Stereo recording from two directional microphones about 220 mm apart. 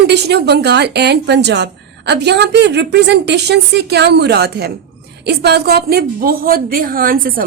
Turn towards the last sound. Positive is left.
turn(degrees=-40)  # may be behind; listen again after turning